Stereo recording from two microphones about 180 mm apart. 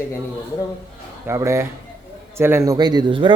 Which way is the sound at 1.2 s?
15° right (ahead or behind).